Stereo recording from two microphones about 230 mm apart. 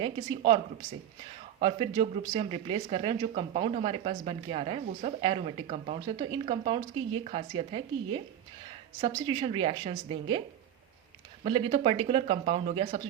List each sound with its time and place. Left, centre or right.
0.0 s speech: right
1.6 s speech: right
11.4 s speech: right